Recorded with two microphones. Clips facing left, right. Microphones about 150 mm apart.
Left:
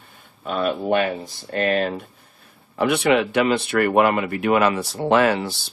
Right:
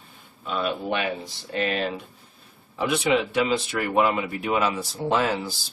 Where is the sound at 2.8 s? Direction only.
65° left (ahead or behind).